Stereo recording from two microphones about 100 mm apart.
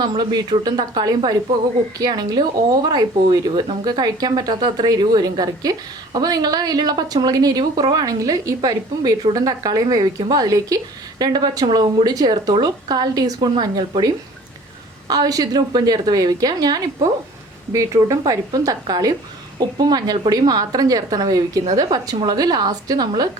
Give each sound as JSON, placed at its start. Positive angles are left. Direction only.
{"t": 0.0, "sound": "a woman's voice", "side_deg": -50}